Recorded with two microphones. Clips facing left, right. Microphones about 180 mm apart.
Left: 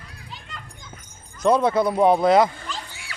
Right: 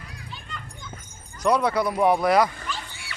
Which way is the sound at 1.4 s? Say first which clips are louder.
Left 3 dB; 25° left (ahead or behind).